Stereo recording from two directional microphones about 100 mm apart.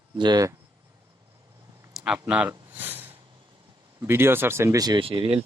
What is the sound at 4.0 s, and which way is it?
Speech, 25° right (ahead or behind).